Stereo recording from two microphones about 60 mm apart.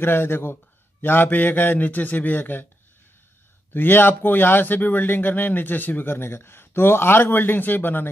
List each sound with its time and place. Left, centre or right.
0.0 s speech: left
3.7 s speech: left